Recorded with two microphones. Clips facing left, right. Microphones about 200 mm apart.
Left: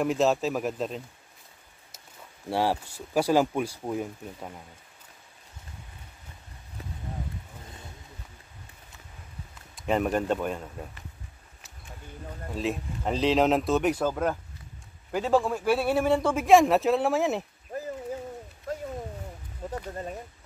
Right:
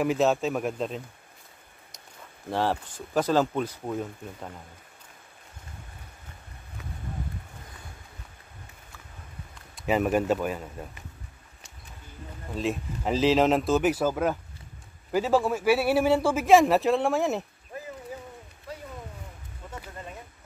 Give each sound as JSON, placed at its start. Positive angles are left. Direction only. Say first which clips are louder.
{"t": 0.0, "sound": "a man's voice", "louder": "even", "side_deg": 0}
{"t": 2.5, "sound": "speech", "louder": "left 1 dB", "side_deg": 10}
{"t": 9.8, "sound": "a man's voice", "louder": "right 2 dB", "side_deg": -5}
{"t": 12.5, "sound": "a man's voice", "louder": "right 1 dB", "side_deg": 0}
{"t": 17.7, "sound": "a sound", "louder": "left 5 dB", "side_deg": 40}